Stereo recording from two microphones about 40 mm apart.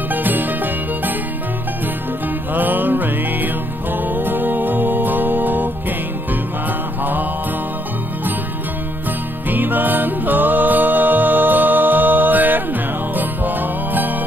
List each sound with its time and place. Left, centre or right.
0.1 s music: right
2.5 s music: right
9.5 s music: right